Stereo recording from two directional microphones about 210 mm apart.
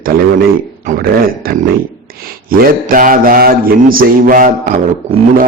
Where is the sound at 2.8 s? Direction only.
40° right (ahead or behind).